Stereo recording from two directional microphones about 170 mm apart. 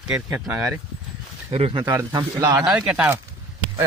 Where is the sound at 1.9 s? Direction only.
15° right (ahead or behind).